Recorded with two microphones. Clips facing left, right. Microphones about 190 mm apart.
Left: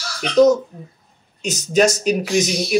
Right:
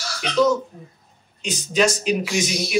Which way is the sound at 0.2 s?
40° left (ahead or behind).